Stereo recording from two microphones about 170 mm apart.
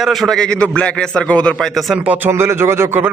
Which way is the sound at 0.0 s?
Centre (ahead or behind).